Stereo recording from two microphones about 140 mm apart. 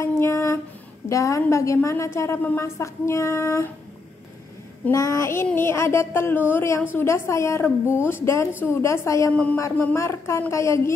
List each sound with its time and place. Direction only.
0.0 s a sound: 20° left (ahead or behind)
1.0 s a woman's voice: 20° left (ahead or behind)
4.9 s a woman's voice: 25° left (ahead or behind)
9.3 s speech: 10° left (ahead or behind)
9.6 s a woman's voice: 20° left (ahead or behind)